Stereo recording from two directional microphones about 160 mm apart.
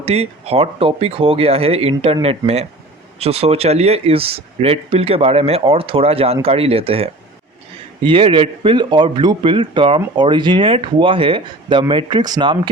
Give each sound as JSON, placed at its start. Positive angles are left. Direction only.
{"t": 0.0, "sound": "speech", "side_deg": -40}
{"t": 3.2, "sound": "speech", "side_deg": -40}